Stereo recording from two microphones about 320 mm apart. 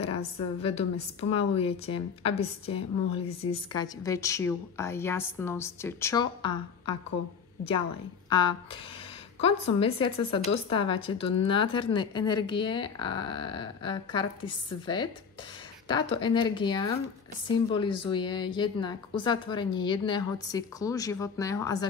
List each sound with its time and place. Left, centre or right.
0.4 s speech: centre
8.3 s speech: centre